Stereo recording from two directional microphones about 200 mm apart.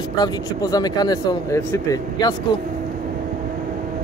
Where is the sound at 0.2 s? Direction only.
20° left (ahead or behind).